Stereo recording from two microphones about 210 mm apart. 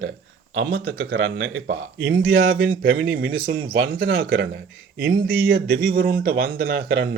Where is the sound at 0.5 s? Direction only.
50° right (ahead or behind).